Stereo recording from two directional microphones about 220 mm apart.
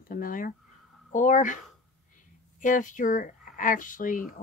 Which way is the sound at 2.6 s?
35° left (ahead or behind).